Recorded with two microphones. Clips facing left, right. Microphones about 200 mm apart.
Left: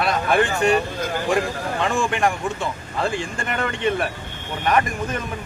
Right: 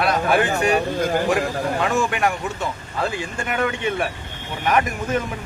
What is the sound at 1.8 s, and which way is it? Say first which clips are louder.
Speech: left 1 dB; 5° right (ahead or behind).